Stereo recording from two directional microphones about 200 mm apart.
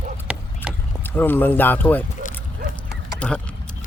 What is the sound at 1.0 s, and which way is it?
A man's voice, 10° left (ahead or behind).